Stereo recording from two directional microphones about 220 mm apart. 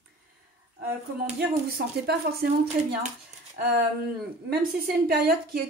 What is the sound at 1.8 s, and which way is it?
Speech, 45° right (ahead or behind).